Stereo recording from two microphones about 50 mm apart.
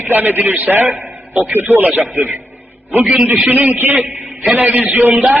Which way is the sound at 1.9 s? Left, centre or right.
Right.